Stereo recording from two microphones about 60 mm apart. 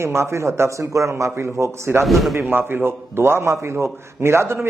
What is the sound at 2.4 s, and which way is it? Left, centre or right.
A man's voice, right.